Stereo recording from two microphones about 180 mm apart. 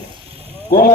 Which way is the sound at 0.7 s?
55° left (ahead or behind).